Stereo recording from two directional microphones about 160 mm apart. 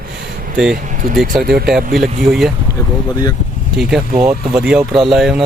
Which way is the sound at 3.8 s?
5° right (ahead or behind).